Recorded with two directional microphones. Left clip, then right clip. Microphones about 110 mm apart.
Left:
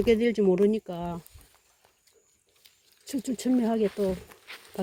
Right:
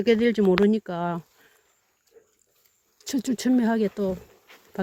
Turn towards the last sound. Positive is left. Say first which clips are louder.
# right 1 dB
turn(degrees=-45)  # may be behind; listen again after turning